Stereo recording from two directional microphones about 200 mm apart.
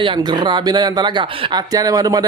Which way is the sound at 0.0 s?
25° right (ahead or behind).